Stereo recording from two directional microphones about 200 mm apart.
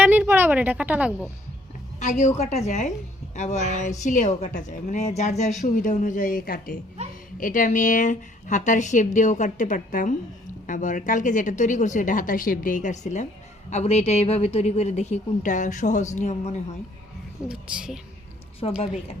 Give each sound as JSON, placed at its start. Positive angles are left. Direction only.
{"t": 0.0, "sound": "speech", "side_deg": -10}
{"t": 2.0, "sound": "a woman's voice", "side_deg": 35}
{"t": 17.5, "sound": "a woman's voice", "side_deg": -5}
{"t": 18.6, "sound": "a woman's voice", "side_deg": 25}